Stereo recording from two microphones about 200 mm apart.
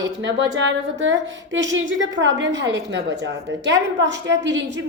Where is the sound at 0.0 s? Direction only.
65° right (ahead or behind).